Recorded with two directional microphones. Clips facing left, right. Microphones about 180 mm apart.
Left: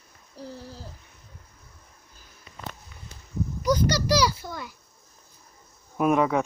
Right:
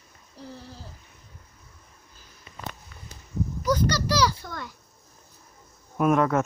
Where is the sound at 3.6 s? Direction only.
15° left (ahead or behind).